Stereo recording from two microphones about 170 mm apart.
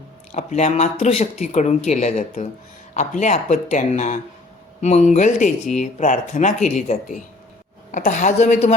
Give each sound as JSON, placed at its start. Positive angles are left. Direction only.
{"t": 0.3, "sound": "speech", "side_deg": 40}